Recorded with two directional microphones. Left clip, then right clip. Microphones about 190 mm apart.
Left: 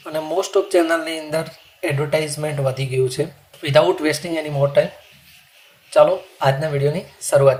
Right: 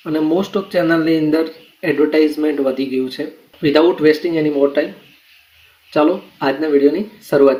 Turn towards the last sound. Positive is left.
turn(degrees=50)  # may be behind; listen again after turning